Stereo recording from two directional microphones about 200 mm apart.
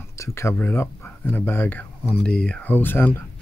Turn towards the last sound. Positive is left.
turn(degrees=10)  # may be behind; listen again after turning